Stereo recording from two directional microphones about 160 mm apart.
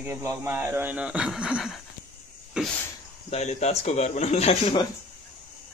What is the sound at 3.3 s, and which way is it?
A man's voice, 45° left (ahead or behind).